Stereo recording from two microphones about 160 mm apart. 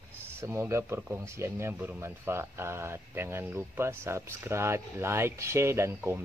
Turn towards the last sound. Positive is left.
turn(degrees=-15)  # may be behind; listen again after turning